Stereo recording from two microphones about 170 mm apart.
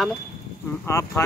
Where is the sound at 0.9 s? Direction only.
15° left (ahead or behind).